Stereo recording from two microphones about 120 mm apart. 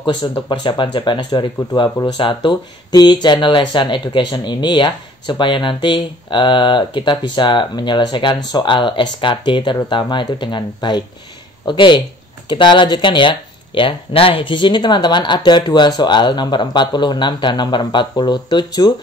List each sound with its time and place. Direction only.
0.0 s speech: 40° left (ahead or behind)